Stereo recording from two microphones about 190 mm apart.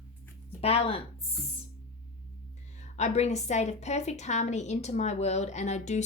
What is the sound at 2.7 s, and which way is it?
A woman's voice, 40° left (ahead or behind).